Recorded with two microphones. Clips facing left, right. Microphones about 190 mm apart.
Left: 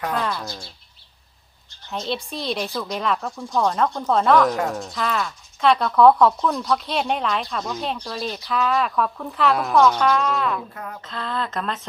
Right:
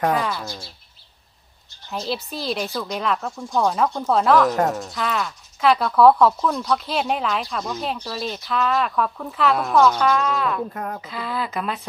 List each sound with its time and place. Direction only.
0.1 s speech: 5° right (ahead or behind)
1.9 s speech: 5° right (ahead or behind)
10.8 s speech: 50° right (ahead or behind)
11.0 s speech: 5° right (ahead or behind)